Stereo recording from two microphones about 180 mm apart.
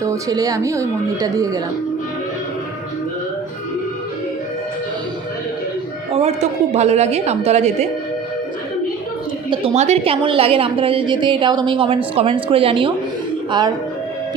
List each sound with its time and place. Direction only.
0.0 s a woman's voice: 20° right (ahead or behind)
6.1 s a woman's voice: 35° right (ahead or behind)
9.5 s a woman's voice: 35° right (ahead or behind)